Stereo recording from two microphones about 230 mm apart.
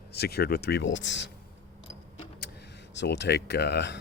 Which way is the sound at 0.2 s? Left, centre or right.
Left.